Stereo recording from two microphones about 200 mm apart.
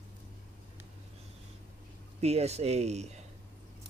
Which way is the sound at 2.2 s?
30° right (ahead or behind).